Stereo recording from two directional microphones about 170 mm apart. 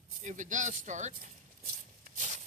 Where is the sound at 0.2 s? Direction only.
45° right (ahead or behind).